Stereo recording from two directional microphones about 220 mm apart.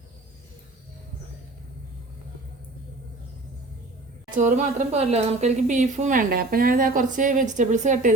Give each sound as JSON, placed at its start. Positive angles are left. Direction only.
{"t": 4.4, "sound": "speech", "side_deg": -35}